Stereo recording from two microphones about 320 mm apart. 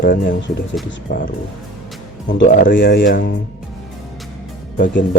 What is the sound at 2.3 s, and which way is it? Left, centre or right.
Speech, left.